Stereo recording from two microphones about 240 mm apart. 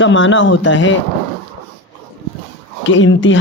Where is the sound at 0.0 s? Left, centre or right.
Left.